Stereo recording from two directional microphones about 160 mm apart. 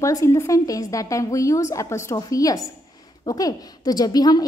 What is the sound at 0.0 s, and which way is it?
A woman's voice, 20° left (ahead or behind).